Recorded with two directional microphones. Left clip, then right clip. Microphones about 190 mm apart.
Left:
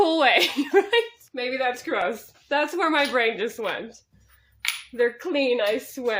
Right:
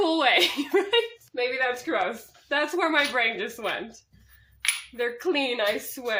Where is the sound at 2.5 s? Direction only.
40° left (ahead or behind).